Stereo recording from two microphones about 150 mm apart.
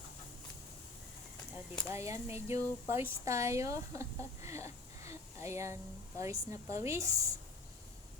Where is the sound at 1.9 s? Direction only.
20° right (ahead or behind).